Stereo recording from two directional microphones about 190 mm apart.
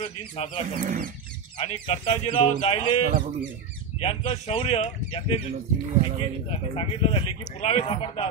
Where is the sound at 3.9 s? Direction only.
35° left (ahead or behind).